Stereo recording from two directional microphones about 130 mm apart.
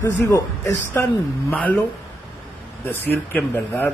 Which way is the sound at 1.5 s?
10° left (ahead or behind).